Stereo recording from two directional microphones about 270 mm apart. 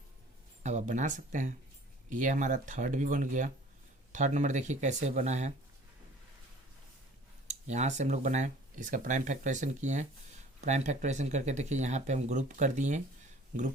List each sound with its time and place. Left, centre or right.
0.6 s speech: right
7.4 s speech: right